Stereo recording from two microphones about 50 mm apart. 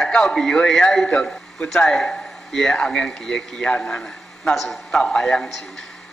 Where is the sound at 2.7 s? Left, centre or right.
Centre.